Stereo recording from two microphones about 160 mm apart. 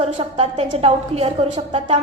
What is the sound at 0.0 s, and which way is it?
A woman's voice, 40° right (ahead or behind).